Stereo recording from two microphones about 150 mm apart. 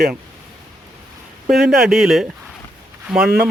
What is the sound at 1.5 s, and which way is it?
Speech, 5° right (ahead or behind).